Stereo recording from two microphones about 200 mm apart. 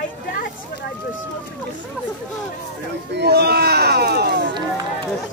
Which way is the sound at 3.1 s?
55° right (ahead or behind).